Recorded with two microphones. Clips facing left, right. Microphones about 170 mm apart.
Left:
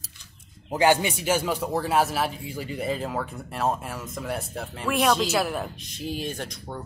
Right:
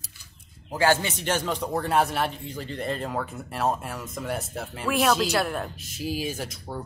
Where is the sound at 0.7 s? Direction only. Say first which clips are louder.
Left 2 dB; 15° left (ahead or behind).